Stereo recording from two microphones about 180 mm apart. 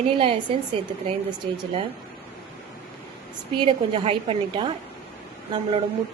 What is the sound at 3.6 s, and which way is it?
A woman's voice, 30° right (ahead or behind).